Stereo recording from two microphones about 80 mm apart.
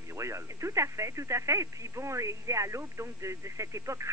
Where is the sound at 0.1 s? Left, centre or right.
Right.